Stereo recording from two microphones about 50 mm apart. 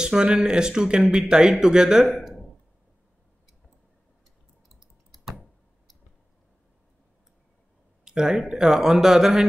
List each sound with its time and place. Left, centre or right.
0.0 s speech: centre
4.6 s a sound: centre
8.0 s speech: centre